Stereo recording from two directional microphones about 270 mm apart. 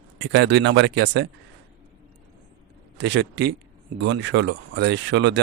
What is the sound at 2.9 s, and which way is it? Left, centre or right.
Speech, right.